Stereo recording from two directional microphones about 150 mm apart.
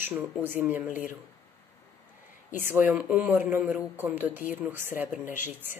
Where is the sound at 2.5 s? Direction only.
15° right (ahead or behind).